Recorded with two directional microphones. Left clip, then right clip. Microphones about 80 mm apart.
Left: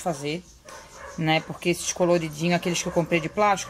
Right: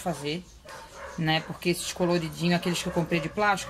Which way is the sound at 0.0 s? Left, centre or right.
Left.